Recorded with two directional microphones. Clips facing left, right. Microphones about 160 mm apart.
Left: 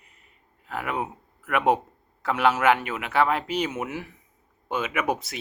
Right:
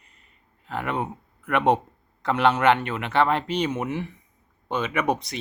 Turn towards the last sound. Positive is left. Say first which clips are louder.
# right 2 dB
turn(degrees=5)  # may be behind; listen again after turning